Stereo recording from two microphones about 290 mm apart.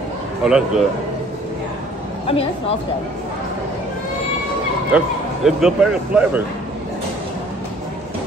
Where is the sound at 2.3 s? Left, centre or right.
Centre.